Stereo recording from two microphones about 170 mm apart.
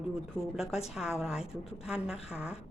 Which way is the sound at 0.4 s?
5° right (ahead or behind).